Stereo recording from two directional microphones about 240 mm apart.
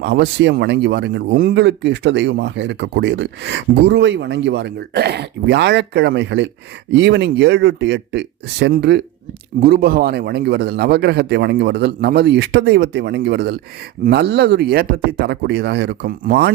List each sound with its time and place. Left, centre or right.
0.0 s speech: right